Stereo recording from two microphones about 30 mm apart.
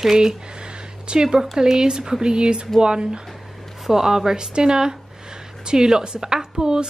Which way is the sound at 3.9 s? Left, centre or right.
Centre.